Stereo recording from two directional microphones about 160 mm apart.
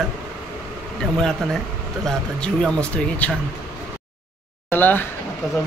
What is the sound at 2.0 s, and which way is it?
Speech, 5° left (ahead or behind).